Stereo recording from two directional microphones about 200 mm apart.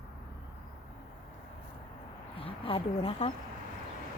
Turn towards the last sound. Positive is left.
turn(degrees=30)  # may be behind; listen again after turning